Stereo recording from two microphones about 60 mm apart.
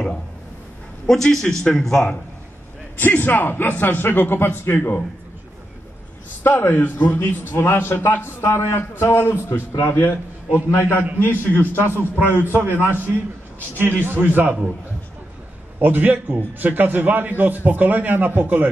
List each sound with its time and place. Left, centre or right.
1.0 s a man's voice: centre
3.0 s a man's voice: left
6.4 s a man's voice: left
12.0 s a man's voice: right
15.8 s a man's voice: right